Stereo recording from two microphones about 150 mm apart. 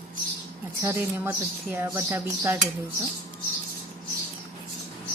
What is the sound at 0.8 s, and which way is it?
Speech, 15° right (ahead or behind).